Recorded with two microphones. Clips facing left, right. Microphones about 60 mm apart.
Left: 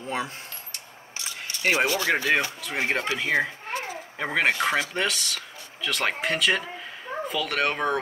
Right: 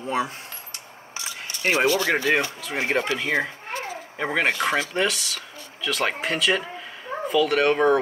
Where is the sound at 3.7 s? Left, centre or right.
Centre.